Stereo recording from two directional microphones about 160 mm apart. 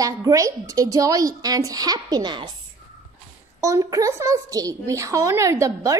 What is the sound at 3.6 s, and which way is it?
A woman's voice, 20° right (ahead or behind).